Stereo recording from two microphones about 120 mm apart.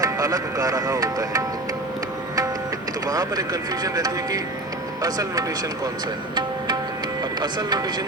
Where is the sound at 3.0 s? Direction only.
30° right (ahead or behind).